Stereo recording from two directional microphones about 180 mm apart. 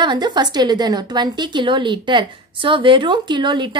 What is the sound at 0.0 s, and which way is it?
A woman's voice, 25° right (ahead or behind).